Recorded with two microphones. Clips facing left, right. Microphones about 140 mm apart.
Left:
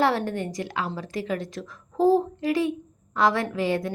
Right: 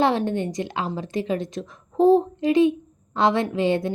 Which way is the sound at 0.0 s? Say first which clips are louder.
Right 3 dB; 20° right (ahead or behind).